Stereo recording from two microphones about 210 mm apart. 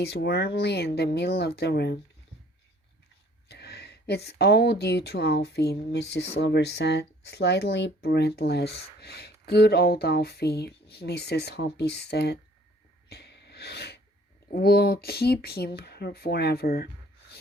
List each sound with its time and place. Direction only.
0.0 s speech: 50° left (ahead or behind)
3.5 s speech: 50° left (ahead or behind)
13.1 s a sound: 50° left (ahead or behind)
14.5 s speech: 50° left (ahead or behind)